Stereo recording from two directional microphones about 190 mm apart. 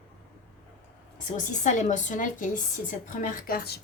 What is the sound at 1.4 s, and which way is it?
A woman's voice, 40° left (ahead or behind).